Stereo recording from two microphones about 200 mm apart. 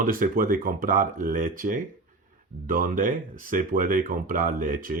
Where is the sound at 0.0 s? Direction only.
45° right (ahead or behind).